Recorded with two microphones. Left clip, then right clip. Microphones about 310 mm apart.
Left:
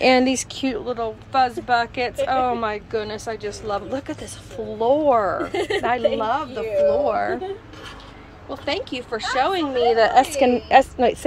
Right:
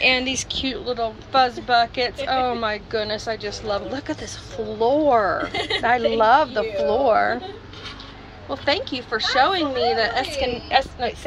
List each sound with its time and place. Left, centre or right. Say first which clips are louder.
0.0 s a woman's voice: left 3 dB; left; by 7.3 s centre
8.5 s a woman's voice: right 3 dB; centre; by 11.1 s left